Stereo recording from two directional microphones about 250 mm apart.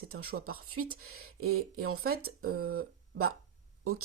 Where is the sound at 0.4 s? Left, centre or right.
Right.